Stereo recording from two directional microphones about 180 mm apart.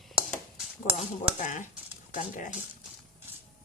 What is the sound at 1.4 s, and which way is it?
Speech, 45° left (ahead or behind).